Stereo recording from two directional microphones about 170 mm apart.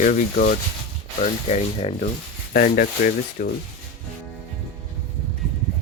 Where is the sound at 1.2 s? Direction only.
40° left (ahead or behind).